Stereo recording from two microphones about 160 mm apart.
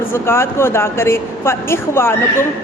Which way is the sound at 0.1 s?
15° left (ahead or behind).